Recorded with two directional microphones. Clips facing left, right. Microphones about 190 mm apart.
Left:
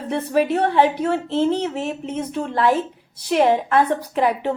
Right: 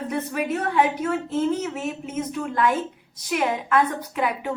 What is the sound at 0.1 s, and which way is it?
A woman's voice, 30° left (ahead or behind).